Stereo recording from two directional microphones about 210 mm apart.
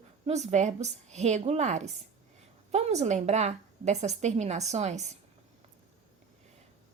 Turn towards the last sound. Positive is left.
turn(degrees=-35)  # may be behind; listen again after turning